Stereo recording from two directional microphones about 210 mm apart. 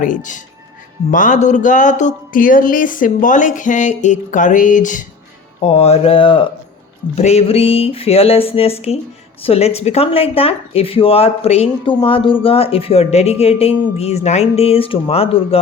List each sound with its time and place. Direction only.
0.0 s speech: 35° left (ahead or behind)